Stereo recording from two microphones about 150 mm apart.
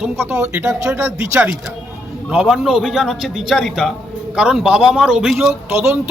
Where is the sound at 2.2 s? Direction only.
5° right (ahead or behind).